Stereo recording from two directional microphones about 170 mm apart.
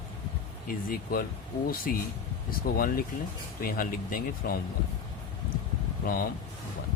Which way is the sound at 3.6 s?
55° left (ahead or behind).